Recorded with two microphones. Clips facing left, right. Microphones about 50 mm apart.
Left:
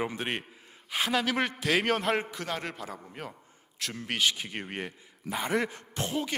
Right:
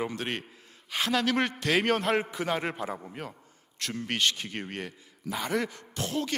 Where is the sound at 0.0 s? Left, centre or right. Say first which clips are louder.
Even; centre.